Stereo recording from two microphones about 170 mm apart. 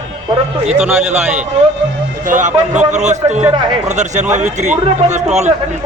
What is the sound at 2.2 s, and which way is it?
A man's voice, 50° right (ahead or behind).